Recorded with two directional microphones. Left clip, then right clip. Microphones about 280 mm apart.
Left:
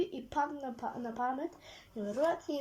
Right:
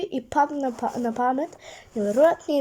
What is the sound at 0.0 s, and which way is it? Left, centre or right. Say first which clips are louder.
Speech: right 11 dB; right.